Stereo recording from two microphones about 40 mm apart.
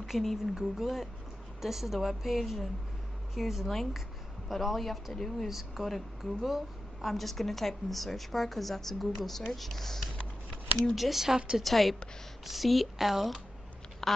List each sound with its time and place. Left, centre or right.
0.0 s a sound: centre
0.6 s a woman's voice: centre
5.5 s a woman's voice: centre
10.9 s a woman's voice: centre
11.3 s a woman's voice: centre
11.6 s a woman's voice: centre
14.0 s speech: centre